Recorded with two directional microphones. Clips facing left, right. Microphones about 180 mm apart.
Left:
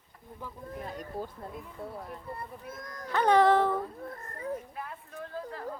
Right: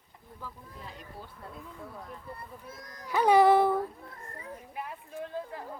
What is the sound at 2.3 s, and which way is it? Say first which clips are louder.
Speech: left 4 dB; 50° left (ahead or behind).